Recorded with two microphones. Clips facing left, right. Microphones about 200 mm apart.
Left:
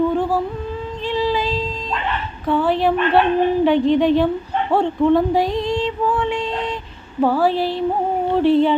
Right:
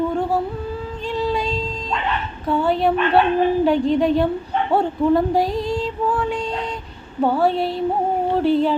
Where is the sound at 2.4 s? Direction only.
Centre (ahead or behind).